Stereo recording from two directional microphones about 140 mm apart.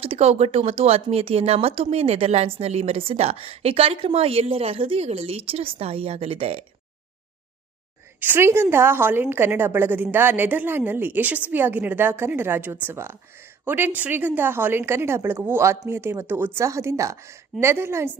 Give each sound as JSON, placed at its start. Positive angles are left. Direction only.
{"t": 0.0, "sound": "a woman's voice", "side_deg": -45}
{"t": 8.2, "sound": "a woman's voice", "side_deg": -15}